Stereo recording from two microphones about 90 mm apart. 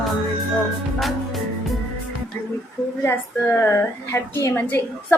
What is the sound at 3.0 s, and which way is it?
A woman's voice, 25° left (ahead or behind).